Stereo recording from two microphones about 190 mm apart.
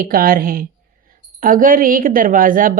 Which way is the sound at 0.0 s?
50° right (ahead or behind).